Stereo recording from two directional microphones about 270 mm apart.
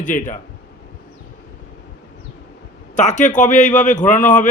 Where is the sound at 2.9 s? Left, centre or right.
Left.